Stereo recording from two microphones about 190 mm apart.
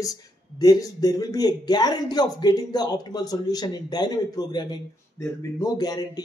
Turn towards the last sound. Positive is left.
turn(degrees=20)  # may be behind; listen again after turning